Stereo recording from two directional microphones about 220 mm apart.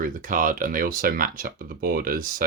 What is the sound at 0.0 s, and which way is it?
Speech, 40° right (ahead or behind).